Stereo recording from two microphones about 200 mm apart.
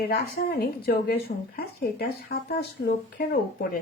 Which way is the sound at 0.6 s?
50° left (ahead or behind).